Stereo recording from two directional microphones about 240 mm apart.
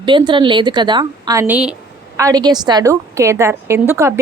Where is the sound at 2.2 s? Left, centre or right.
Centre.